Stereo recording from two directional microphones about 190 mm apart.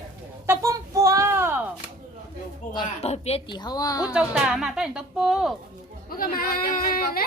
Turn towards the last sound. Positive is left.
turn(degrees=50)  # may be behind; listen again after turning